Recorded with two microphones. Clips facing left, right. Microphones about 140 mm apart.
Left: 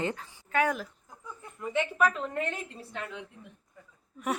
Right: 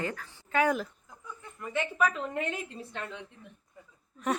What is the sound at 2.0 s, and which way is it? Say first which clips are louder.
A woman's voice: even; centre (ahead or behind).